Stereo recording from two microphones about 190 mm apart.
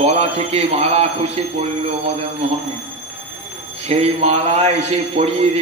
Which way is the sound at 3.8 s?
35° right (ahead or behind).